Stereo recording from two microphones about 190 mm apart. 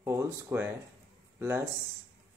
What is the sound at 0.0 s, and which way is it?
Speech, 15° right (ahead or behind).